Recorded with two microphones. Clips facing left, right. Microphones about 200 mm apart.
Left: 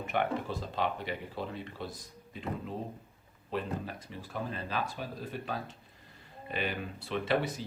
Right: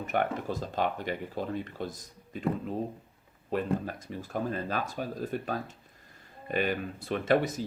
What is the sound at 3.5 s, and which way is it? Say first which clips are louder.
Speech: right 5 dB; 45° right (ahead or behind).